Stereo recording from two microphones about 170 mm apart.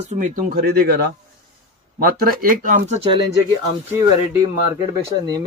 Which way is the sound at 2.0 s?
65° right (ahead or behind).